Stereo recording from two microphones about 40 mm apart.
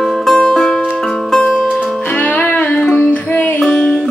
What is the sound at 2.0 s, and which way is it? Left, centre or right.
Music, left.